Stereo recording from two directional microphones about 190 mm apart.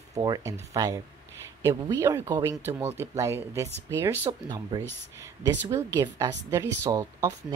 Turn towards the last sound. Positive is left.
turn(degrees=-20)  # may be behind; listen again after turning